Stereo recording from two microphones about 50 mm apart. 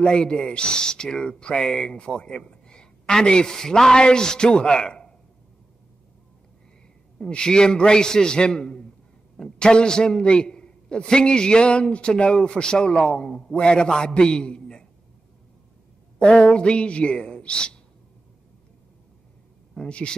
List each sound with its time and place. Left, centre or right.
0.0 s a man's voice: centre
7.2 s a man's voice: centre
16.2 s speech: left
19.9 s speech: left